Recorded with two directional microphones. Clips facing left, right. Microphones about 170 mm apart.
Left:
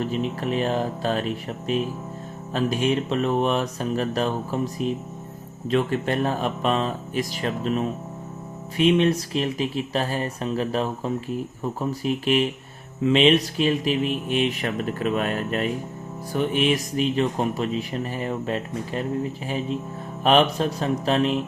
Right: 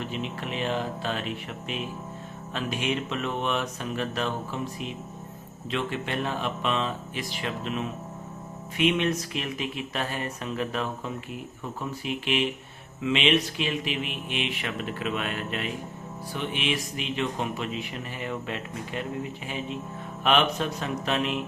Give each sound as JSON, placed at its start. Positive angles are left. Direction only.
{"t": 0.0, "sound": "speech", "side_deg": 40}